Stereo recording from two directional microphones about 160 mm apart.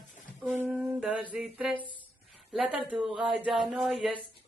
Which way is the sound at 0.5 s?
10° right (ahead or behind).